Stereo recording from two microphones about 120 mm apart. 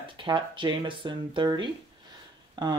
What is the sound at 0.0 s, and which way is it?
Speech, 45° right (ahead or behind).